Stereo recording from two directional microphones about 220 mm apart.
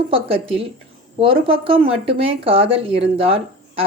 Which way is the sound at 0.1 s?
25° right (ahead or behind).